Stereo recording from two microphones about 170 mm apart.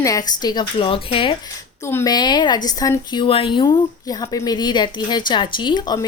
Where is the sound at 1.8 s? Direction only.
15° left (ahead or behind).